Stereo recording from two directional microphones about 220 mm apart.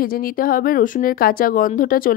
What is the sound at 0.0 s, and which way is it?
Speech, 40° left (ahead or behind).